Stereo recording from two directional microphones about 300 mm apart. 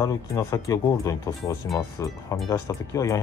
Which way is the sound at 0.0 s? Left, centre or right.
Centre.